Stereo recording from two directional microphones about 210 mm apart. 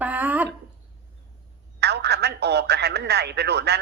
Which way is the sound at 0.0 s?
5° right (ahead or behind).